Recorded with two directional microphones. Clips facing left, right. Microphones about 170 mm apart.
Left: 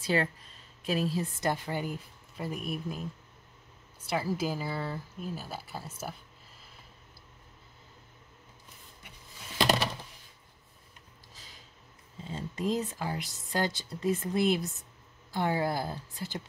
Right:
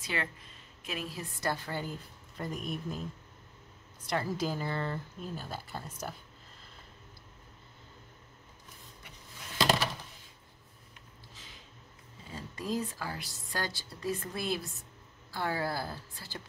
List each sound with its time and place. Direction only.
0.0 s a woman's voice: 35° left (ahead or behind); by 3.0 s 10° left (ahead or behind)
4.1 s speech: 5° left (ahead or behind)
12.3 s speech: 25° left (ahead or behind)